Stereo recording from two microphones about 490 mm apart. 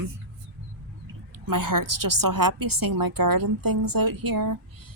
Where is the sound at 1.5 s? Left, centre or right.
Right.